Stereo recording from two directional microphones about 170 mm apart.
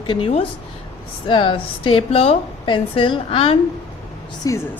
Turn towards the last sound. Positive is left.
turn(degrees=20)  # may be behind; listen again after turning